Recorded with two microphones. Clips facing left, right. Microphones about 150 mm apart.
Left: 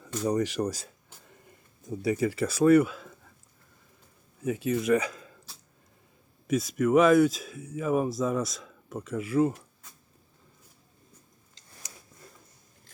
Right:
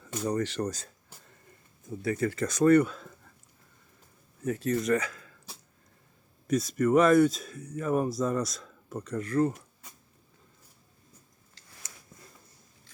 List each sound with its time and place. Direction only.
0.2 s speech: 10° left (ahead or behind)
1.9 s speech: 15° left (ahead or behind)
4.4 s speech: 5° left (ahead or behind)
5.0 s a sound: 20° left (ahead or behind)
6.5 s speech: centre (ahead or behind)
11.6 s a sound: 20° left (ahead or behind)